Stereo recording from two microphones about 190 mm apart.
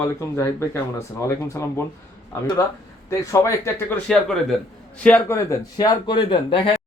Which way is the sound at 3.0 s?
15° left (ahead or behind).